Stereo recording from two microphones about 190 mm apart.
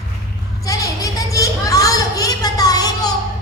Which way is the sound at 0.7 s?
15° left (ahead or behind).